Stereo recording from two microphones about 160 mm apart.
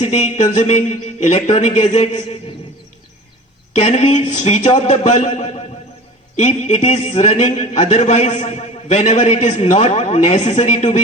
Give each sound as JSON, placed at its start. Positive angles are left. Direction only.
{"t": 0.0, "sound": "a man's voice", "side_deg": 45}
{"t": 3.8, "sound": "a man's voice", "side_deg": 45}